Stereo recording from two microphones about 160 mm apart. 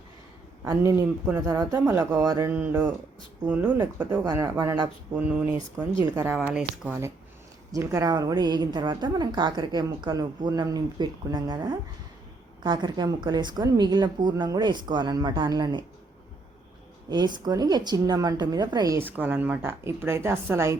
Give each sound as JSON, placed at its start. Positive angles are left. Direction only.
{"t": 0.6, "sound": "speech", "side_deg": -20}
{"t": 1.5, "sound": "a woman's voice", "side_deg": -25}
{"t": 1.9, "sound": "speech", "side_deg": -10}
{"t": 2.1, "sound": "a woman's voice", "side_deg": -25}
{"t": 2.5, "sound": "speech", "side_deg": -10}
{"t": 4.0, "sound": "a woman's voice", "side_deg": -25}
{"t": 5.1, "sound": "a woman's voice", "side_deg": -10}
{"t": 17.1, "sound": "a woman's voice", "side_deg": -25}